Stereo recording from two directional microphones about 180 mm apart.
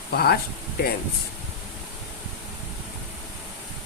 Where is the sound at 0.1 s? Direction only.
60° left (ahead or behind).